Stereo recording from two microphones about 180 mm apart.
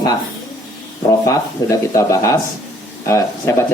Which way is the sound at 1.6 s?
20° left (ahead or behind).